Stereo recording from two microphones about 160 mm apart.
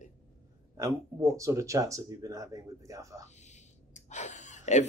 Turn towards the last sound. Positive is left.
turn(degrees=45)  # may be behind; listen again after turning